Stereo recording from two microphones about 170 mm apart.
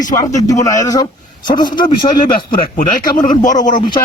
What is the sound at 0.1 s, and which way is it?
A man's voice, 20° left (ahead or behind).